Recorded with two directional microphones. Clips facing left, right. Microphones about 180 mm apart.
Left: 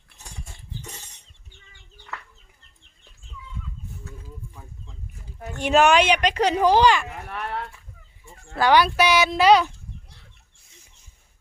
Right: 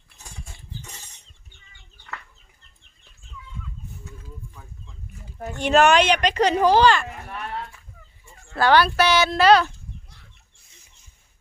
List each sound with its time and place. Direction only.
5.5 s speech: 10° left (ahead or behind)
7.3 s a sound: 65° left (ahead or behind)
8.5 s speech: 15° left (ahead or behind)